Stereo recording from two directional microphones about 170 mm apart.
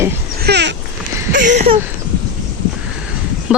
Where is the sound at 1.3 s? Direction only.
45° right (ahead or behind).